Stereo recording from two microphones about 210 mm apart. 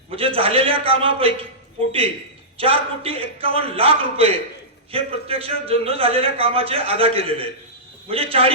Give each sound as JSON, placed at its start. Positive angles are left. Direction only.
{"t": 0.1, "sound": "a man's voice", "side_deg": -25}
{"t": 2.6, "sound": "a man's voice", "side_deg": -25}